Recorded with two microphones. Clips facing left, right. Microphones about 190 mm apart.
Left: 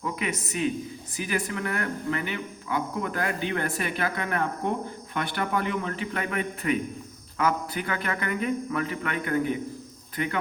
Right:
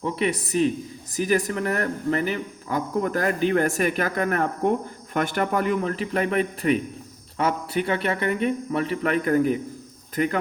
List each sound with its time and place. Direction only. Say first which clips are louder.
0.0 s a man's voice: right 6 dB; 35° right (ahead or behind)